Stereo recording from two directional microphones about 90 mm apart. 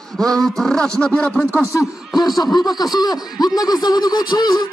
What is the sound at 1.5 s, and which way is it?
Speech, 35° left (ahead or behind).